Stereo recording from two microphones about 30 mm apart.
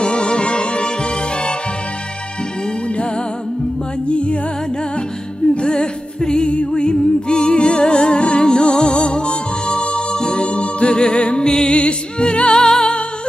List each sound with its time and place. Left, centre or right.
0.0 s music: left
4.1 s music: left
5.7 s music: left
6.5 s music: left
8.5 s music: left
11.4 s music: left
11.7 s music: left
12.6 s music: left